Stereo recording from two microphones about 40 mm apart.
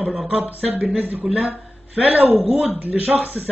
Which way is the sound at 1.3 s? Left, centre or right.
Right.